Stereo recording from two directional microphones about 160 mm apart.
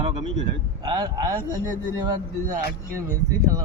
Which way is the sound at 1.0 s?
25° right (ahead or behind).